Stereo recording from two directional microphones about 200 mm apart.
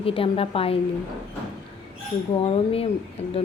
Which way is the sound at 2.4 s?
30° left (ahead or behind).